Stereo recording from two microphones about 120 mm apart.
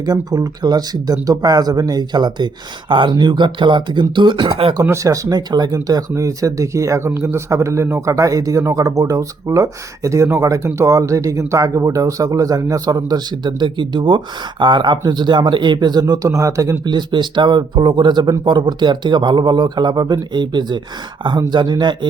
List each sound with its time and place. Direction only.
0.0 s speech: 35° right (ahead or behind); by 4.8 s 50° right (ahead or behind)
4.8 s speech: 25° right (ahead or behind)